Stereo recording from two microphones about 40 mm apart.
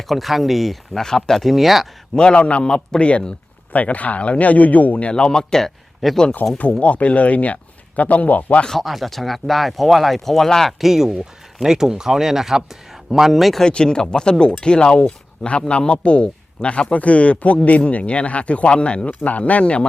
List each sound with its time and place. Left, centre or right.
0.1 s speech: centre
1.0 s speech: centre
1.5 s speech: centre
2.3 s speech: left
3.7 s speech: left; by 5.7 s centre
6.0 s speech: centre
6.4 s speech: left
6.7 s speech: left
8.8 s speech: centre
10.7 s speech: centre
13.6 s speech: centre